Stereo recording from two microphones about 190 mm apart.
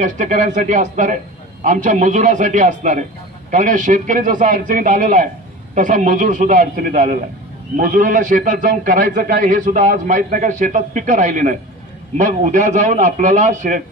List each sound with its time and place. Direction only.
0.0 s a man's voice: 40° right (ahead or behind)